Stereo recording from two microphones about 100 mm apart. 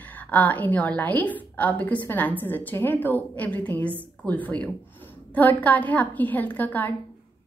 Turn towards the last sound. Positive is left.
turn(degrees=20)  # may be behind; listen again after turning